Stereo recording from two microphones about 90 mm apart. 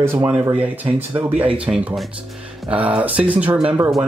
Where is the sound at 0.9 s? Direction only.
20° right (ahead or behind).